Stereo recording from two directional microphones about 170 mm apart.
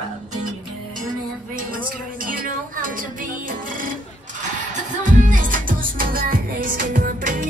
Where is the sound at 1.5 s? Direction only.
55° right (ahead or behind).